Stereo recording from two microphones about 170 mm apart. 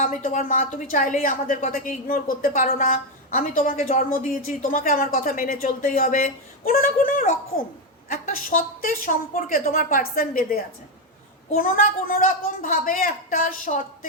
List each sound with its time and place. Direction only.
0.0 s a woman's voice: 50° left (ahead or behind)